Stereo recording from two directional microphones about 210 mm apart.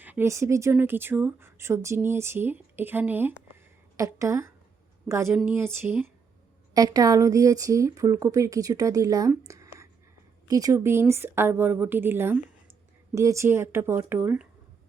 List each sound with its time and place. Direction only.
0.0 s a woman's voice: 10° right (ahead or behind)